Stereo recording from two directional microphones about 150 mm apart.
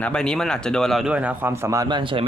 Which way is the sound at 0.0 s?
5° left (ahead or behind).